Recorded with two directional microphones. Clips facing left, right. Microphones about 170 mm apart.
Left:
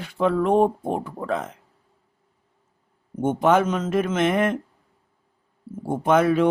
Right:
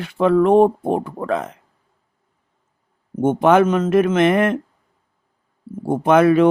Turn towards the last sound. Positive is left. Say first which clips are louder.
# right 5 dB
turn(degrees=-70)  # may be behind; listen again after turning